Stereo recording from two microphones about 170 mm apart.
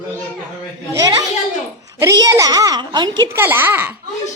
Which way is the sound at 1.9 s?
20° right (ahead or behind).